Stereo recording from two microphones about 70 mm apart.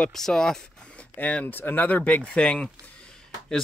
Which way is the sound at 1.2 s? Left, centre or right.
Left.